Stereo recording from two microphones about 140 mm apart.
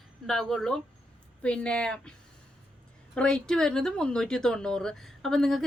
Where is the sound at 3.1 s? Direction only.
5° left (ahead or behind).